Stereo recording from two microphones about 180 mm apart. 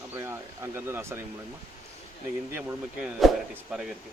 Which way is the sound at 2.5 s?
5° right (ahead or behind).